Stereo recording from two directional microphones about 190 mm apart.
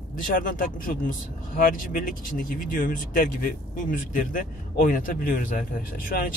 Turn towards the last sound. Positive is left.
turn(degrees=45)  # may be behind; listen again after turning